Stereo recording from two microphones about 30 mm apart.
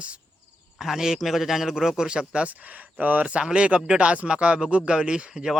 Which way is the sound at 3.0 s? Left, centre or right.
Right.